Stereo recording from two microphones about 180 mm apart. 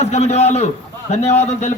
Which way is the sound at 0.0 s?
35° left (ahead or behind).